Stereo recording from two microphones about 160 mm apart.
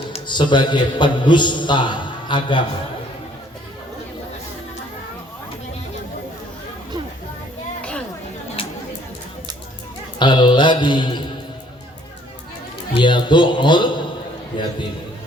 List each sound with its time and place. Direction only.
0.1 s a man's voice: 30° left (ahead or behind)
7.8 s a sound: 5° left (ahead or behind)
8.6 s chatter: 35° left (ahead or behind)
10.2 s a man's voice: 30° left (ahead or behind)
12.9 s a man's voice: 30° left (ahead or behind)